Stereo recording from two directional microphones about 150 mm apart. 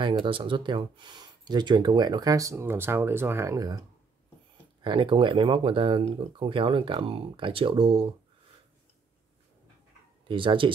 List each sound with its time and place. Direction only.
0.2 s speech: 35° right (ahead or behind)
4.8 s speech: 35° right (ahead or behind)
10.2 s speech: 35° right (ahead or behind)